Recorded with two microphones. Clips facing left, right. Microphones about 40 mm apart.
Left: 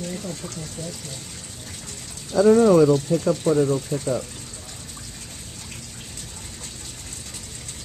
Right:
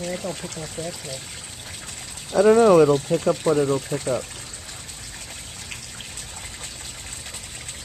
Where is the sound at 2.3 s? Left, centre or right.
Right.